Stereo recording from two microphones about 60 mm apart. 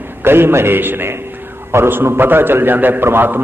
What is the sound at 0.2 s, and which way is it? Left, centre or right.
A man's voice, right.